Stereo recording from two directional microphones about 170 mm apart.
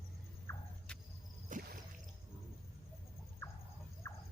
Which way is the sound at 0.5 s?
15° left (ahead or behind).